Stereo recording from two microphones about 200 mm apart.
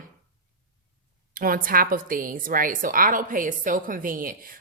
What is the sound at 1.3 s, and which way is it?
A woman's voice, 45° right (ahead or behind).